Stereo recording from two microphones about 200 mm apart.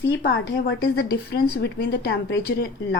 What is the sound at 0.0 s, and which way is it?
Speech, 60° left (ahead or behind).